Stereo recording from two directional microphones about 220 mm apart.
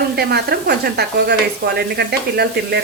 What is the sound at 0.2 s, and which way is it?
Speech, 45° right (ahead or behind).